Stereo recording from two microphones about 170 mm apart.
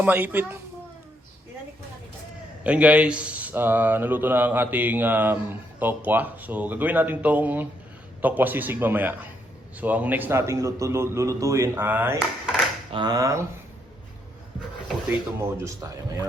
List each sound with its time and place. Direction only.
0.0 s speech: 10° right (ahead or behind)
2.6 s speech: 5° right (ahead or behind)
12.9 s speech: 25° right (ahead or behind)
15.4 s speech: 15° right (ahead or behind)